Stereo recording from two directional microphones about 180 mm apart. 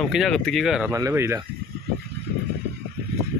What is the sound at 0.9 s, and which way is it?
Speech, 15° right (ahead or behind).